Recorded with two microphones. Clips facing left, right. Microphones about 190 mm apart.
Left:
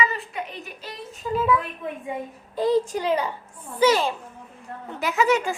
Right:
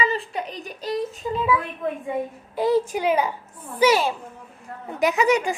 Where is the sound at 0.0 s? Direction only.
30° right (ahead or behind).